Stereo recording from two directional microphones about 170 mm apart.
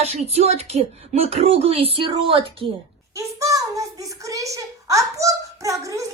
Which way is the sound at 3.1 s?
20° right (ahead or behind).